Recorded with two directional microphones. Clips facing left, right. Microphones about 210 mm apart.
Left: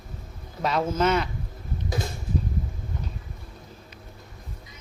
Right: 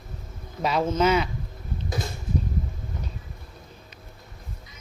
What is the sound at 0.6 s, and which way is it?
Speech, centre (ahead or behind).